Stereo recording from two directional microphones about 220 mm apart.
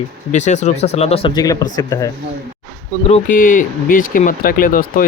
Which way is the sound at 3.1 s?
40° left (ahead or behind).